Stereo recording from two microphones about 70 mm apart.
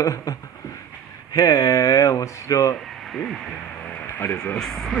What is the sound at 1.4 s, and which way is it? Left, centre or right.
Speech, left.